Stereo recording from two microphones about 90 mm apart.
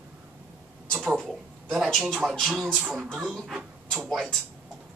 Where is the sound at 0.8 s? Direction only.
5° left (ahead or behind).